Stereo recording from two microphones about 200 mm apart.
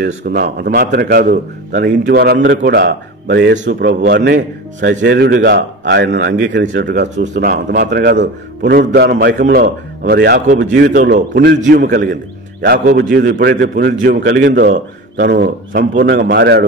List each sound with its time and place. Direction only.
0.0 s a man's voice: 50° right (ahead or behind)
1.8 s a man's voice: 55° right (ahead or behind)
11.6 s a man's voice: 45° right (ahead or behind)